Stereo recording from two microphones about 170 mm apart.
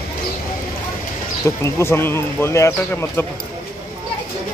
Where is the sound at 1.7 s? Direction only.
15° left (ahead or behind).